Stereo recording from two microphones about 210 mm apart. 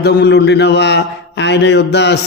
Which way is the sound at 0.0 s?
50° left (ahead or behind).